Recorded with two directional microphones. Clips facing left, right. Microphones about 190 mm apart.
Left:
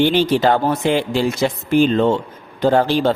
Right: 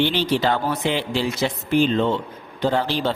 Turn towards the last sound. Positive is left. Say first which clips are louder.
# left 6 dB
turn(degrees=50)  # may be behind; listen again after turning